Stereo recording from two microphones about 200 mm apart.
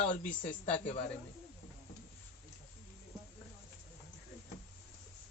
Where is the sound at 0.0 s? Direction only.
35° left (ahead or behind).